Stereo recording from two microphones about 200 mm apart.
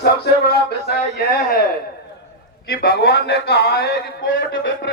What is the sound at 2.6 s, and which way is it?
Speech, 50° left (ahead or behind).